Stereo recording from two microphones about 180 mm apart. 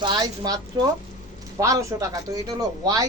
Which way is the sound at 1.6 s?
15° right (ahead or behind).